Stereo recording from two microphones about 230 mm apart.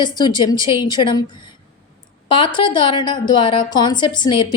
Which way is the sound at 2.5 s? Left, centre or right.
Centre.